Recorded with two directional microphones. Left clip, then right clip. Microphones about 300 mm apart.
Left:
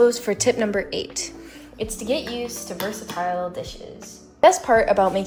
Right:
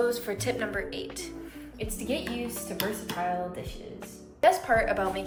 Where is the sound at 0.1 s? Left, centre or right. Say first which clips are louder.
Left 9 dB; left.